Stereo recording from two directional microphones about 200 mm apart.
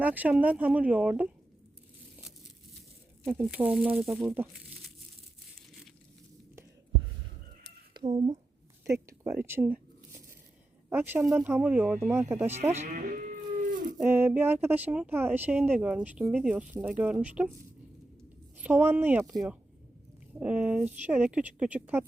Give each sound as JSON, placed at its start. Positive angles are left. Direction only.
{"t": 0.0, "sound": "speech", "side_deg": -10}
{"t": 3.2, "sound": "speech", "side_deg": -10}
{"t": 7.9, "sound": "speech", "side_deg": -25}
{"t": 8.8, "sound": "speech", "side_deg": -15}
{"t": 10.8, "sound": "speech", "side_deg": -10}
{"t": 12.7, "sound": "a sound", "side_deg": -40}
{"t": 14.0, "sound": "speech", "side_deg": -10}
{"t": 18.5, "sound": "speech", "side_deg": -10}
{"t": 20.4, "sound": "speech", "side_deg": -5}